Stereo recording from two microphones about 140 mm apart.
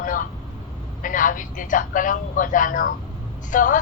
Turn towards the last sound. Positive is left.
turn(degrees=70)  # may be behind; listen again after turning